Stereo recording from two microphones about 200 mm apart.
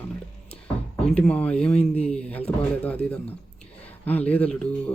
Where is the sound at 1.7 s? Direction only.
30° left (ahead or behind).